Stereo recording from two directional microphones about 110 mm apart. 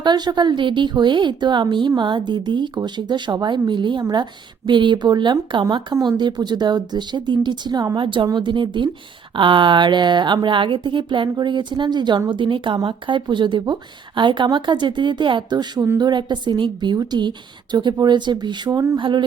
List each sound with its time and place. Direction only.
0.0 s a woman's voice: 40° right (ahead or behind)